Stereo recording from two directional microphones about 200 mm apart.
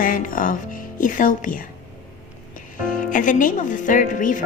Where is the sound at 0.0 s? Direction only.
45° left (ahead or behind).